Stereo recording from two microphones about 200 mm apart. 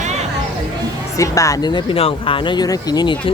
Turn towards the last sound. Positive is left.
turn(degrees=20)  # may be behind; listen again after turning